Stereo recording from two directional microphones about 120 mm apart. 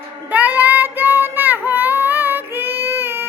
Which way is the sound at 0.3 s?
15° right (ahead or behind).